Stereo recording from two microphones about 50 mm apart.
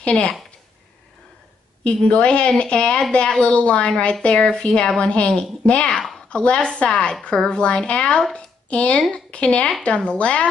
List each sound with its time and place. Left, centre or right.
0.0 s speech: left
1.9 s speech: centre
5.9 s speech: centre
6.2 s a woman's voice: left